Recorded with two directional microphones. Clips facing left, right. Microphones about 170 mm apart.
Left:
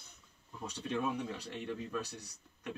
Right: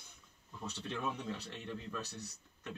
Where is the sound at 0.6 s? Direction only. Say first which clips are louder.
Left 4 dB; 15° left (ahead or behind).